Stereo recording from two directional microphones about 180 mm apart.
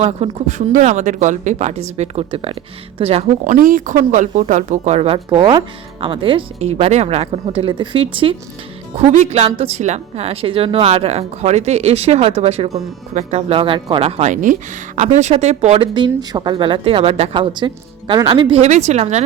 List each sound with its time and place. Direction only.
0.0 s speech: 35° right (ahead or behind)